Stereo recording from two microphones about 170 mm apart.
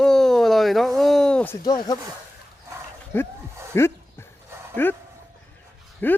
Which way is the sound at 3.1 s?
15° left (ahead or behind).